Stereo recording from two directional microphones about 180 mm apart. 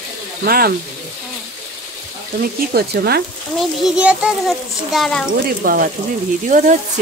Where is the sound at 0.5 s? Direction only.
55° right (ahead or behind).